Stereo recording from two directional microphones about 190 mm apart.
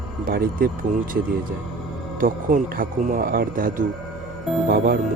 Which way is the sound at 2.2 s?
45° right (ahead or behind).